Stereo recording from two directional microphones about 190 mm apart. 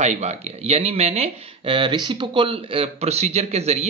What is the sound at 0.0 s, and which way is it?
Speech, 35° right (ahead or behind).